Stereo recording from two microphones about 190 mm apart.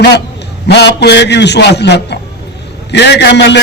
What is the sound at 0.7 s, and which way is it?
A man's voice, 65° left (ahead or behind).